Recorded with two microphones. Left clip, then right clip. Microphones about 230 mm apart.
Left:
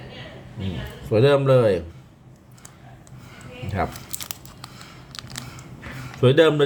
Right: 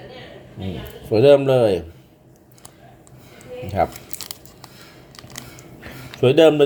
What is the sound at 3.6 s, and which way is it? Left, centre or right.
Speech, centre.